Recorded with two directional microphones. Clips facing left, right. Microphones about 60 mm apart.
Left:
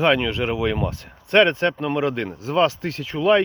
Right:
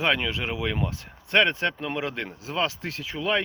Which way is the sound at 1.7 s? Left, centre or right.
Left.